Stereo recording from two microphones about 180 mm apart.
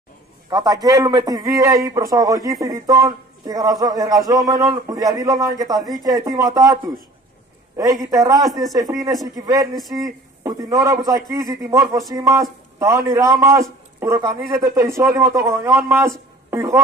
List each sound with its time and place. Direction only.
0.5 s a man's voice: 20° right (ahead or behind)